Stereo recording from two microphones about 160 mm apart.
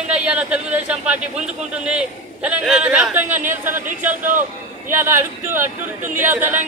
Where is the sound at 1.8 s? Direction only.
5° right (ahead or behind).